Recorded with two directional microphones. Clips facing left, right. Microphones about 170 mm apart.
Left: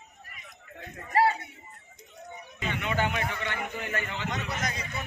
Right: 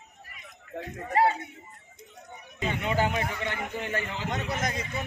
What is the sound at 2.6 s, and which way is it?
A man's voice, 35° right (ahead or behind).